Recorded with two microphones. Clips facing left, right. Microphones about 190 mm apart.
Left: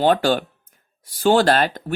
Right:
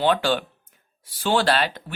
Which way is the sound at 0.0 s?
45° left (ahead or behind).